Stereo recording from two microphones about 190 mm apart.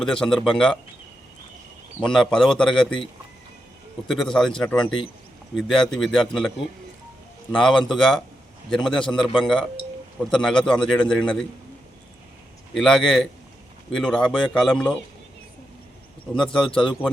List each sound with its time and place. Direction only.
0.0 s a man's voice: 5° left (ahead or behind)
2.0 s a man's voice: 5° left (ahead or behind)
4.1 s a man's voice: centre (ahead or behind)
7.6 s a man's voice: centre (ahead or behind)
10.7 s a man's voice: 5° left (ahead or behind)
12.7 s a man's voice: centre (ahead or behind)
16.3 s a man's voice: 5° left (ahead or behind)
16.6 s speech: 25° left (ahead or behind)